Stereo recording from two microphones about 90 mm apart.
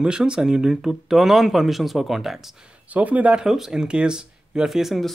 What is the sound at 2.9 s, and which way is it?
Speech, 15° right (ahead or behind).